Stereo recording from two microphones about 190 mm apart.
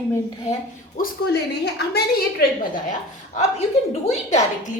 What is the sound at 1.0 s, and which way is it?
A woman's voice, 60° left (ahead or behind).